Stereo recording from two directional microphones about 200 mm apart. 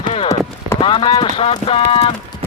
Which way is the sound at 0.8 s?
25° left (ahead or behind).